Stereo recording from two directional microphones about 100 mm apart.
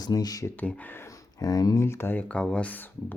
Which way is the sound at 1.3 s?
40° left (ahead or behind).